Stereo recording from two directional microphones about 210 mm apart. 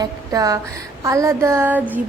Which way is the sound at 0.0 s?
15° right (ahead or behind).